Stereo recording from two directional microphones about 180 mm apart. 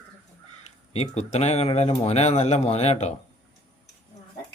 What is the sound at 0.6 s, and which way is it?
Speech, 35° left (ahead or behind).